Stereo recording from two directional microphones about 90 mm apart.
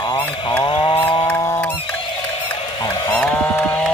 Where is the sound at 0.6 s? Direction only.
75° left (ahead or behind).